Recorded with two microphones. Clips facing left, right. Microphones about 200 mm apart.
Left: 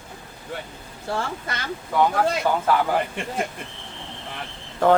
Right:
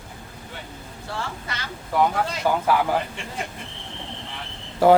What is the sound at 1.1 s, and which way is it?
Speech, 50° left (ahead or behind).